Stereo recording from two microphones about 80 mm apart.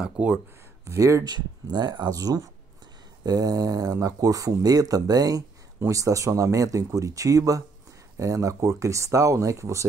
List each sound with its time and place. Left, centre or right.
0.0 s speech: centre
0.8 s speech: right
1.2 s speech: right